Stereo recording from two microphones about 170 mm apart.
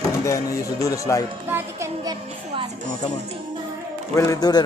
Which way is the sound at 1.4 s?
15° right (ahead or behind).